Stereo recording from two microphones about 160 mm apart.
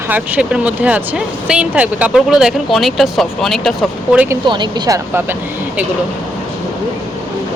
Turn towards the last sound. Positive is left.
turn(degrees=-15)  # may be behind; listen again after turning